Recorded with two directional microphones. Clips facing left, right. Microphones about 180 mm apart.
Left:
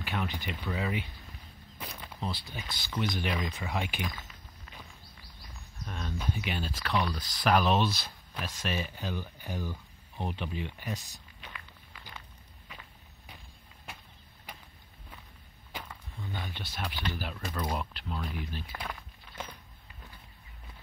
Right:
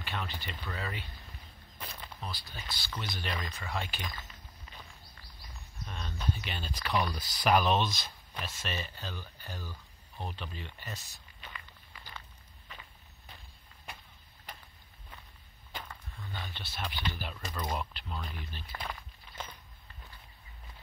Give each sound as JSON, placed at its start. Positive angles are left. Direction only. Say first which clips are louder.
{"t": 0.0, "sound": "speech", "louder": "left 5 dB", "side_deg": 15}
{"t": 1.8, "sound": "a sound", "louder": "left 2 dB", "side_deg": 10}
{"t": 2.1, "sound": "speech", "louder": "left 8 dB", "side_deg": 25}
{"t": 5.9, "sound": "speech", "louder": "left 1 dB", "side_deg": 5}
{"t": 11.4, "sound": "walk", "louder": "even", "side_deg": 0}
{"t": 14.5, "sound": "a sound", "louder": "left 1 dB", "side_deg": 10}
{"t": 15.7, "sound": "speech", "louder": "left 1 dB", "side_deg": 10}